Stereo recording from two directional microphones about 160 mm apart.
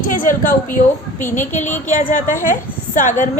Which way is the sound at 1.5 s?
50° left (ahead or behind).